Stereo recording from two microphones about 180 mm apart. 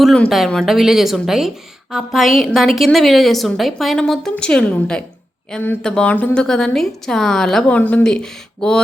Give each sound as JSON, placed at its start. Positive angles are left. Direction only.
{"t": 0.0, "sound": "speech", "side_deg": 0}